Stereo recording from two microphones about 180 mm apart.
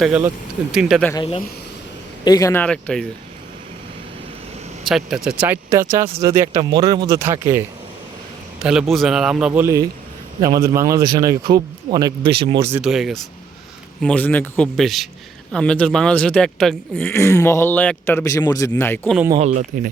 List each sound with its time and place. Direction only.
0.0 s speech: 5° right (ahead or behind)
1.1 s speech: 25° left (ahead or behind); by 3.1 s 5° left (ahead or behind)
4.9 s speech: centre (ahead or behind)
8.5 s a sound: 5° right (ahead or behind)
8.9 s speech: centre (ahead or behind)
9.5 s speech: 15° right (ahead or behind)
12.8 s speech: centre (ahead or behind)
17.1 s speech: 15° left (ahead or behind)
19.4 s speech: 45° right (ahead or behind)